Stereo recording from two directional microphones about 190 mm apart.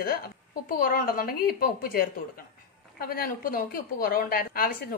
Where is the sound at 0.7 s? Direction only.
50° left (ahead or behind).